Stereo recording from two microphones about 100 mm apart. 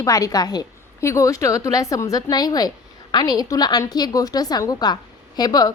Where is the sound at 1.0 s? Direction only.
30° left (ahead or behind).